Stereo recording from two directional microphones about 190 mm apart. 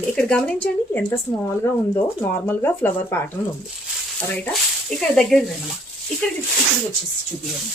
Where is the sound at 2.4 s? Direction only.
10° left (ahead or behind).